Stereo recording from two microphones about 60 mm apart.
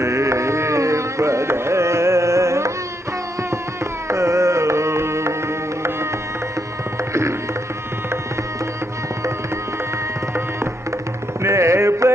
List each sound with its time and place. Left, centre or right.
0.0 s carnatic music: right
4.1 s music: right
11.4 s music: right